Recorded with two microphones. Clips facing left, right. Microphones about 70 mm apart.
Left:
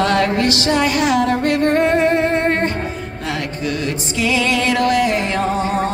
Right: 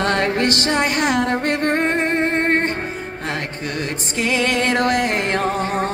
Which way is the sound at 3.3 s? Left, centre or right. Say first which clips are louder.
Left 4 dB; right.